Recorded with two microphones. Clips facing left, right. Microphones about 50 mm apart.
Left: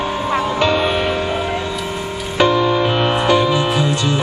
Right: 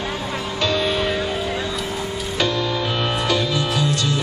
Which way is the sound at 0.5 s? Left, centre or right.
Left.